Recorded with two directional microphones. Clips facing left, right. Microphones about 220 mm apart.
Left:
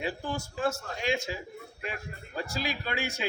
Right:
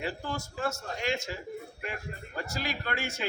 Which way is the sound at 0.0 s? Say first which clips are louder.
Left 1 dB; 15° left (ahead or behind).